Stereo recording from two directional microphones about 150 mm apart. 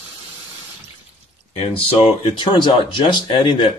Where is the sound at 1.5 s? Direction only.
40° left (ahead or behind).